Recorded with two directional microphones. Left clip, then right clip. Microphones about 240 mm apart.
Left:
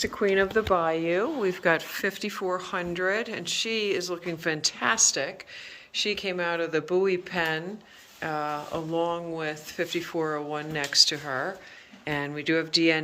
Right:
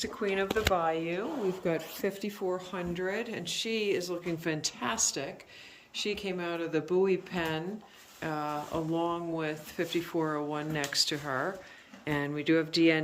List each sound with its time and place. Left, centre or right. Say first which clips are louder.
0.0 s speech: left 7 dB; centre
1.6 s speech: left 7 dB; centre